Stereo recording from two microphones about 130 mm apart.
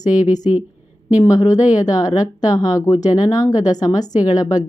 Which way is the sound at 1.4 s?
65° left (ahead or behind).